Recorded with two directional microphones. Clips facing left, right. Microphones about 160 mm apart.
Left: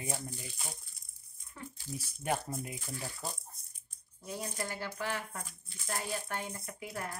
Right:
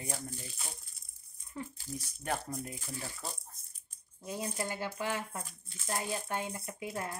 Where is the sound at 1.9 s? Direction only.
10° left (ahead or behind).